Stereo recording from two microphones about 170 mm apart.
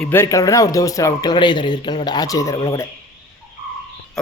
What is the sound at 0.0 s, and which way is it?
A man's voice, 15° left (ahead or behind).